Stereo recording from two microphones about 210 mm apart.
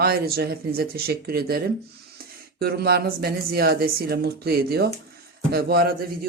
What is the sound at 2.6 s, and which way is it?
A man's voice, 50° right (ahead or behind).